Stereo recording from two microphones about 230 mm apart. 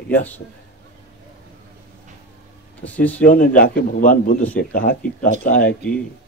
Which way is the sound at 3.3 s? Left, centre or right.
Left.